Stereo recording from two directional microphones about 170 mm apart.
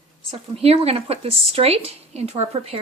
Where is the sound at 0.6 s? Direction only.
35° right (ahead or behind).